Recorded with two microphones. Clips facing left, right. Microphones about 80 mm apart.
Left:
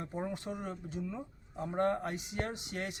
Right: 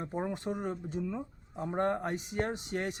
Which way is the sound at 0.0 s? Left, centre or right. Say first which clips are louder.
Right 3 dB; right.